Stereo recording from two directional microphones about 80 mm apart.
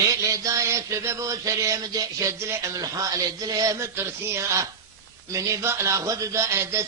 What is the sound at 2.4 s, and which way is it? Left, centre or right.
Mantra, right.